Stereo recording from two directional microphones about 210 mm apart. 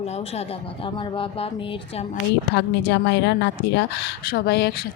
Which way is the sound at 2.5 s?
55° left (ahead or behind).